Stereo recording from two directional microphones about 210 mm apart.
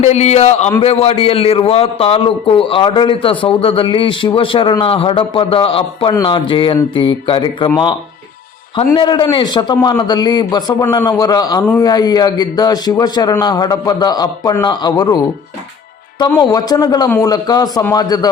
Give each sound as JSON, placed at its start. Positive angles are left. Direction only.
{"t": 0.0, "sound": "a man's voice", "side_deg": 30}
{"t": 8.9, "sound": "a man's voice", "side_deg": 20}